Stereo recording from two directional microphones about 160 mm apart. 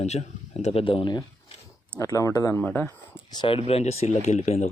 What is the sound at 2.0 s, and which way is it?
Speech, 20° left (ahead or behind).